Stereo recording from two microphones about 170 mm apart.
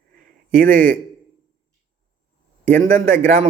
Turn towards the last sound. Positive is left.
turn(degrees=-55)  # may be behind; listen again after turning